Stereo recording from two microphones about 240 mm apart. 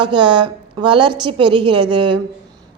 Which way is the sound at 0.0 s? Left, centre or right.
Centre.